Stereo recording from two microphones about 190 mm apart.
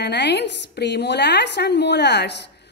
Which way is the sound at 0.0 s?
60° left (ahead or behind).